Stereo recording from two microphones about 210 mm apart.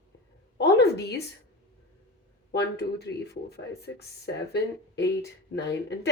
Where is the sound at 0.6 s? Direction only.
50° left (ahead or behind).